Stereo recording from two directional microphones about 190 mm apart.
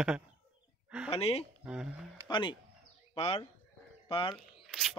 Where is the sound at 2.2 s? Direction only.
25° left (ahead or behind).